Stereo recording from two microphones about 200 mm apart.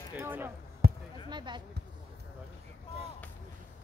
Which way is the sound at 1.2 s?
20° right (ahead or behind).